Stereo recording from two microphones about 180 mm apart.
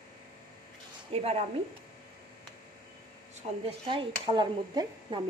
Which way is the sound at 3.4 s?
40° right (ahead or behind).